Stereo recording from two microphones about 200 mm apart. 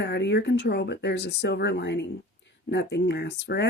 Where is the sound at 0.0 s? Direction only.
60° left (ahead or behind).